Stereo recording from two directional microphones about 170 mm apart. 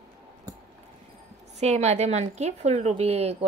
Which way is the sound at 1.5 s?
40° right (ahead or behind).